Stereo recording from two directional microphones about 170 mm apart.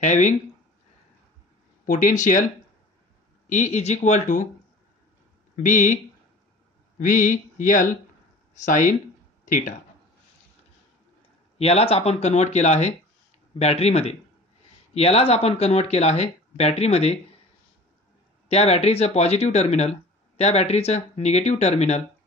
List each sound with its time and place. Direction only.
0.0 s speech: 45° left (ahead or behind)
1.9 s speech: 50° left (ahead or behind)
3.4 s speech: 45° left (ahead or behind)
5.6 s speech: 50° left (ahead or behind)
7.0 s speech: 50° left (ahead or behind)
11.5 s speech: 35° left (ahead or behind)
18.5 s speech: 40° left (ahead or behind)